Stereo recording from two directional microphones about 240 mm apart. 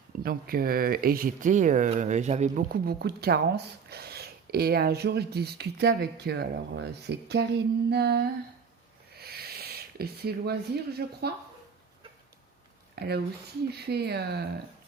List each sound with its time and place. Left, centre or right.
0.2 s speech: right
13.0 s speech: right